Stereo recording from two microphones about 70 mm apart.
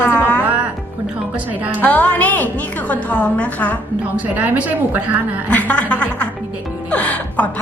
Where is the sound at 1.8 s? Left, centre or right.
Left.